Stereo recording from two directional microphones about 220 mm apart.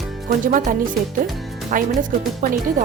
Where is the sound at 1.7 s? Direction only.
40° right (ahead or behind).